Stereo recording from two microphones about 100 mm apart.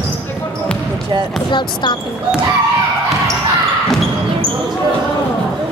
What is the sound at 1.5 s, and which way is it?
Speech, 50° left (ahead or behind).